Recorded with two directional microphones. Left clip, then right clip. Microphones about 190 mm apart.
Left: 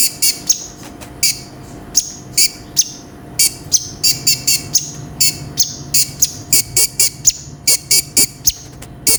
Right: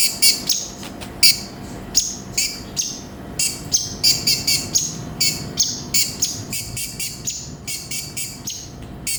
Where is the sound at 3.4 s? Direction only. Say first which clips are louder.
Left 6 dB; 20° left (ahead or behind).